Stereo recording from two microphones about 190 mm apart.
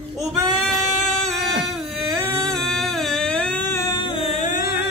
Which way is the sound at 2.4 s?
Centre (ahead or behind).